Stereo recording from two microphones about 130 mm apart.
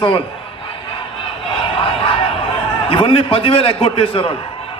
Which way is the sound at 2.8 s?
45° left (ahead or behind).